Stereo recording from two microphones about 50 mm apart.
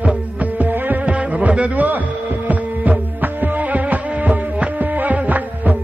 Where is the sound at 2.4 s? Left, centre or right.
Right.